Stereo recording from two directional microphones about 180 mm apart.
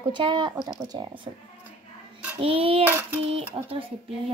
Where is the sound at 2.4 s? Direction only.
30° right (ahead or behind).